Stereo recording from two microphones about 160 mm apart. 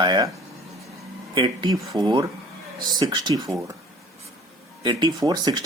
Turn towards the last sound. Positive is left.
turn(degrees=-25)  # may be behind; listen again after turning